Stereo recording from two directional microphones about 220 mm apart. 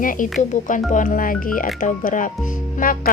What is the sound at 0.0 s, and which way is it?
A woman's voice, 35° left (ahead or behind).